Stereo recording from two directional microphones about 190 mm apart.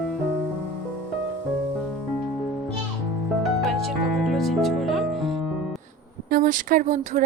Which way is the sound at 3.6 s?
Centre (ahead or behind).